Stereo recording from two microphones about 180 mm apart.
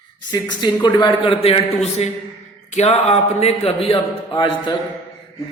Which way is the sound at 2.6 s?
40° left (ahead or behind).